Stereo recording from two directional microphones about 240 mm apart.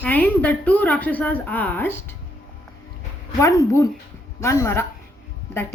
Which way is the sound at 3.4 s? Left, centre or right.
Centre.